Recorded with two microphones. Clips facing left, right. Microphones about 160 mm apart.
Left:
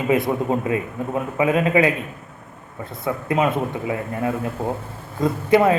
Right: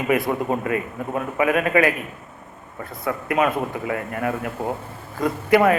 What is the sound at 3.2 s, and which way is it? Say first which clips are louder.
A man's voice: left 1 dB; 25° left (ahead or behind).